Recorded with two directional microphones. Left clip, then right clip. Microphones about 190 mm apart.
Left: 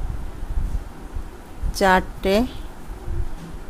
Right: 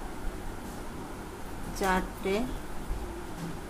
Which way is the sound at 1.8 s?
55° left (ahead or behind).